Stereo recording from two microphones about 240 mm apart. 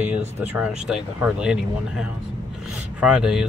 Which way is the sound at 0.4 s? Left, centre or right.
Centre.